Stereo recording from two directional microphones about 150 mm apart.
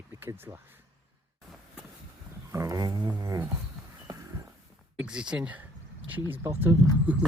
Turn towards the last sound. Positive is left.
turn(degrees=-10)  # may be behind; listen again after turning